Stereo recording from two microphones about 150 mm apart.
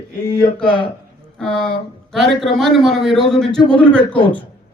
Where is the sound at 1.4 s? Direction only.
5° left (ahead or behind).